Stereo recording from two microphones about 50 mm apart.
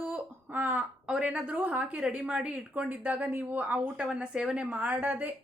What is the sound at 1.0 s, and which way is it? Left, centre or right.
A woman's voice, right.